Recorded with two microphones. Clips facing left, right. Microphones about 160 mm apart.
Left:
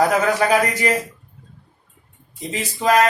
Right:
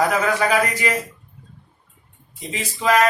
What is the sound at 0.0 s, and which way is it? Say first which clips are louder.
A man's voice: left 2 dB; 40° left (ahead or behind).